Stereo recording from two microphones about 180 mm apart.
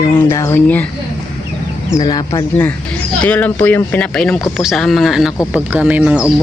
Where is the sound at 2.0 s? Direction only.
25° left (ahead or behind).